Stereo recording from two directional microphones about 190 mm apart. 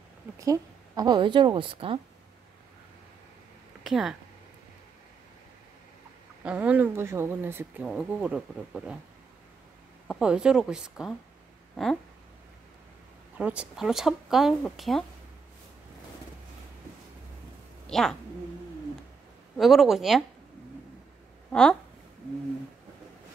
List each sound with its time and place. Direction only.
0.4 s a woman's voice: 20° right (ahead or behind)
3.8 s speech: centre (ahead or behind)
6.4 s speech: 5° right (ahead or behind)
10.0 s speech: centre (ahead or behind)
11.7 s a sound: centre (ahead or behind)
13.4 s speech: 5° right (ahead or behind)
17.8 s speech: centre (ahead or behind)
19.5 s speech: centre (ahead or behind)
21.5 s speech: 5° left (ahead or behind)